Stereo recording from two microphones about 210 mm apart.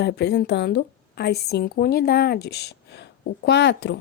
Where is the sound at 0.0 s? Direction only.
50° left (ahead or behind).